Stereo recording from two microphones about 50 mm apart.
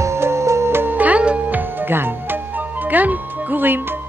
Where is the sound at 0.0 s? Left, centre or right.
Right.